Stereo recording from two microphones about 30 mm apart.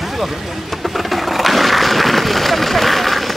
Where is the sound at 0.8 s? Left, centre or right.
Centre.